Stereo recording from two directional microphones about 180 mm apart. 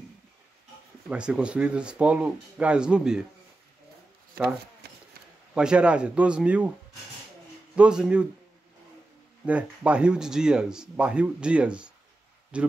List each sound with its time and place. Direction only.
1.0 s speech: 5° right (ahead or behind)
4.8 s a sound: 65° right (ahead or behind)
5.5 s a man's voice: 5° right (ahead or behind)
7.7 s a man's voice: 5° right (ahead or behind)
9.5 s a man's voice: 5° right (ahead or behind)